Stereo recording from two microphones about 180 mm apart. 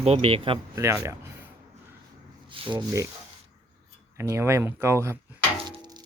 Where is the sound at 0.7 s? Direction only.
15° right (ahead or behind).